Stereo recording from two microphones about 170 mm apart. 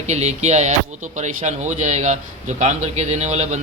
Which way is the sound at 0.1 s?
40° right (ahead or behind).